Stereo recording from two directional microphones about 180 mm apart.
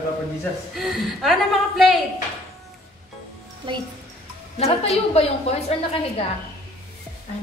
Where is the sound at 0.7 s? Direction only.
Centre (ahead or behind).